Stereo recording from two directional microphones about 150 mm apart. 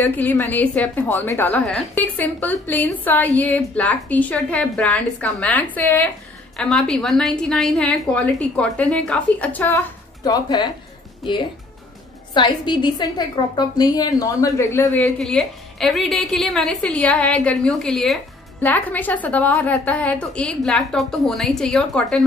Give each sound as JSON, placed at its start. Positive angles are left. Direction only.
{"t": 0.0, "sound": "a woman's voice", "side_deg": 10}
{"t": 1.6, "sound": "a woman's voice", "side_deg": 5}
{"t": 10.2, "sound": "a woman's voice", "side_deg": 25}
{"t": 12.4, "sound": "a woman's voice", "side_deg": 30}